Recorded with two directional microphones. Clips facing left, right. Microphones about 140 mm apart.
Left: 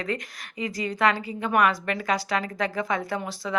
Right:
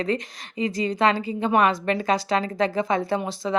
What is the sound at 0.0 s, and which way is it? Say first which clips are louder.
A woman's voice: right 5 dB; 25° right (ahead or behind).